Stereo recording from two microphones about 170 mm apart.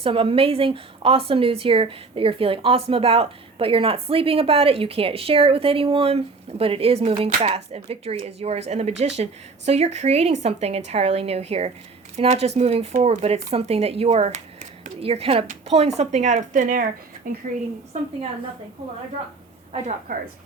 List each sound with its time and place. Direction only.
0.0 s a woman's voice: 35° right (ahead or behind); by 17.4 s 55° right (ahead or behind)
20.1 s speech: 50° right (ahead or behind)